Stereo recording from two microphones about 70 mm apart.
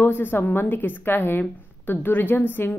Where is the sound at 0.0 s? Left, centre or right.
Left.